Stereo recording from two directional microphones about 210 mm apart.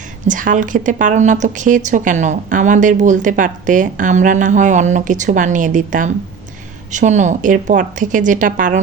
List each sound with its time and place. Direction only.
0.3 s a woman's voice: 40° right (ahead or behind)